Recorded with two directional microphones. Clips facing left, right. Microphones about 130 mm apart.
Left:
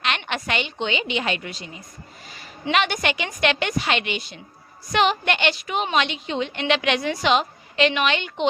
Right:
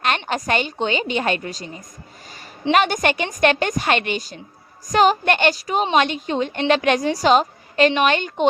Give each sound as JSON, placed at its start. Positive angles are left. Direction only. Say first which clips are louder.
{"t": 0.3, "sound": "a woman's voice", "louder": "right 5 dB", "side_deg": -40}